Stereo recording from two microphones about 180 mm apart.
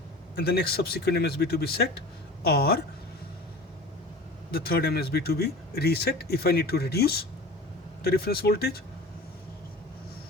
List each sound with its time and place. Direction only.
0.3 s speech: 60° left (ahead or behind)
4.5 s speech: 60° left (ahead or behind)